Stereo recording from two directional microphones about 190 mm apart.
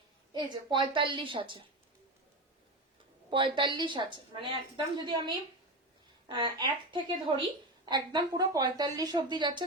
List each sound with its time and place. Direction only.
0.3 s a woman's voice: 25° right (ahead or behind)
3.2 s a woman's voice: 25° right (ahead or behind)